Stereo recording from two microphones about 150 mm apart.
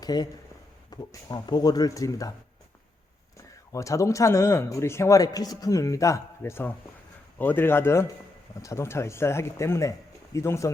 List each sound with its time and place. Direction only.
0.0 s a man's voice: 25° left (ahead or behind)
3.7 s a man's voice: 20° left (ahead or behind)